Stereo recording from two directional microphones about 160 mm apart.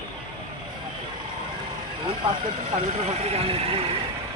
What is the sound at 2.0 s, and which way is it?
Speech, 30° right (ahead or behind).